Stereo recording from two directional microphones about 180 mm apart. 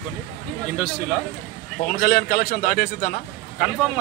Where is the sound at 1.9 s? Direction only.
60° left (ahead or behind).